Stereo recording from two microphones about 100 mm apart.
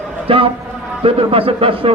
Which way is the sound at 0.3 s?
65° right (ahead or behind).